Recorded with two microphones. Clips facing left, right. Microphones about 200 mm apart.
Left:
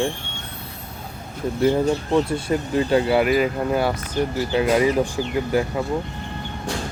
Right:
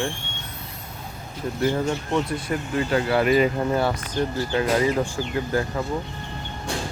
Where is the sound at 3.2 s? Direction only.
5° left (ahead or behind).